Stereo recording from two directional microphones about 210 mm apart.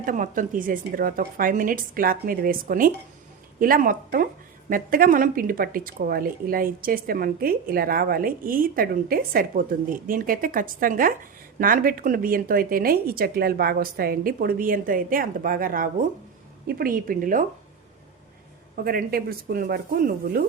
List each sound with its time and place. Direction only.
0.0 s a woman's voice: 40° right (ahead or behind)
18.8 s a woman's voice: 45° right (ahead or behind)